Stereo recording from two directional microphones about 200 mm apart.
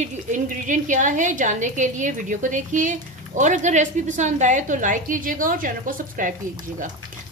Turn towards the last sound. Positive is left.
turn(degrees=-40)  # may be behind; listen again after turning